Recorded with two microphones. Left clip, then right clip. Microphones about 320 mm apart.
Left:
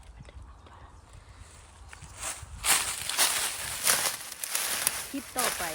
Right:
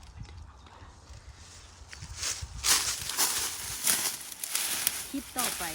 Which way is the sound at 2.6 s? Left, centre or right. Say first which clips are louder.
Even; left.